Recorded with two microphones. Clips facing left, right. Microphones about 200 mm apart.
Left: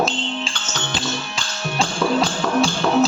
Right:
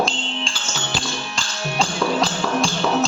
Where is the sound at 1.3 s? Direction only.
Centre (ahead or behind).